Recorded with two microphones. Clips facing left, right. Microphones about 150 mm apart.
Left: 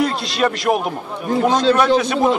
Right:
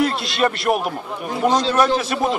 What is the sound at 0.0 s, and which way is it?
A man's voice, centre (ahead or behind).